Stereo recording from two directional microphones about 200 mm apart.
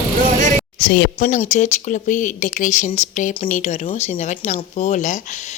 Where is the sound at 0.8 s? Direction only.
55° left (ahead or behind).